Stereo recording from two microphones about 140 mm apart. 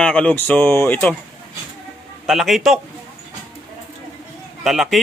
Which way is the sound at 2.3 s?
Centre (ahead or behind).